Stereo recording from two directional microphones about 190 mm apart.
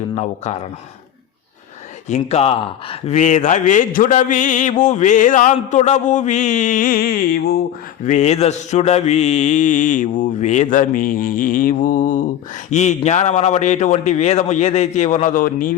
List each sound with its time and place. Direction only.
0.4 s speech: 35° left (ahead or behind)
2.0 s speech: 35° left (ahead or behind); by 7.6 s 55° left (ahead or behind)
8.0 s speech: 40° left (ahead or behind)